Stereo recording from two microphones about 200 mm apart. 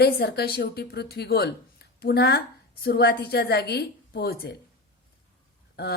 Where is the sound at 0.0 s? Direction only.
55° left (ahead or behind).